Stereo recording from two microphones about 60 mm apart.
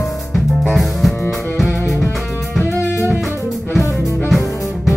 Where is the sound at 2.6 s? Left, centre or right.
Left.